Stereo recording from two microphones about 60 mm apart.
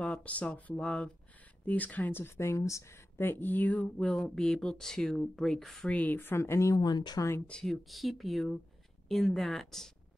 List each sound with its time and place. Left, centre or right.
0.0 s speech: left
3.2 s speech: left
4.1 s speech: centre
5.9 s speech: left
6.3 s speech: left
6.7 s speech: left
7.6 s speech: centre